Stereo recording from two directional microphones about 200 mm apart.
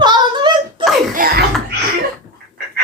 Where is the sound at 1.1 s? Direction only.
45° right (ahead or behind).